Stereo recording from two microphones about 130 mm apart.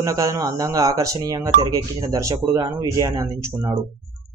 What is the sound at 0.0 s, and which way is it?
Speech, 25° right (ahead or behind).